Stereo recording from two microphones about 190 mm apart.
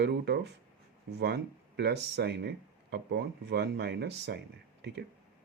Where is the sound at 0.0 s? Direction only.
65° right (ahead or behind).